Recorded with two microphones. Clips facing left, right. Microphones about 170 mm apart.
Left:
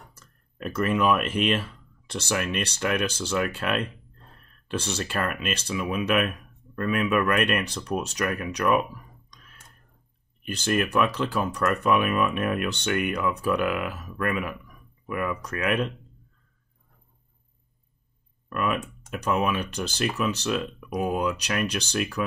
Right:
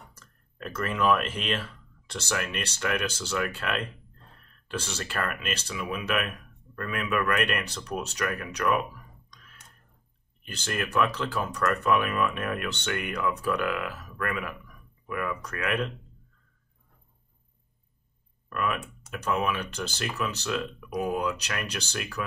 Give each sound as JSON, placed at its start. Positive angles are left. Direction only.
{"t": 0.6, "sound": "speech", "side_deg": 15}
{"t": 10.4, "sound": "speech", "side_deg": 15}
{"t": 18.5, "sound": "speech", "side_deg": 20}